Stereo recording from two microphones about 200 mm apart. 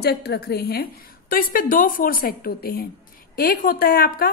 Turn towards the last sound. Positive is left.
turn(degrees=45)  # may be behind; listen again after turning